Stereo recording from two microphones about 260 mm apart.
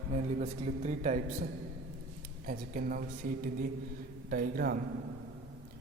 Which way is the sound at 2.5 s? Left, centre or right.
Right.